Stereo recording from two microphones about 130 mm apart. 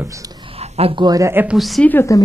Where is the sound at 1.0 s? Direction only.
25° right (ahead or behind).